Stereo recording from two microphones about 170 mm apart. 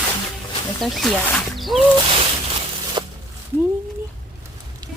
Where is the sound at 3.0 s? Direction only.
25° right (ahead or behind).